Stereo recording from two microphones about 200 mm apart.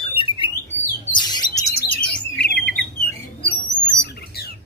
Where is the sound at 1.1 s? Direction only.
20° left (ahead or behind).